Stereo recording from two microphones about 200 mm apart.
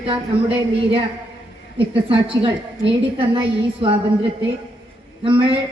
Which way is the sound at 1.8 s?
25° right (ahead or behind).